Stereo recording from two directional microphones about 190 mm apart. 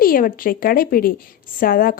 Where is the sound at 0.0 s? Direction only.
50° left (ahead or behind).